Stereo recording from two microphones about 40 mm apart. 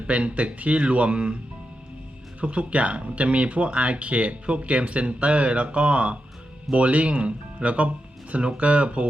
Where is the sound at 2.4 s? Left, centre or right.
Right.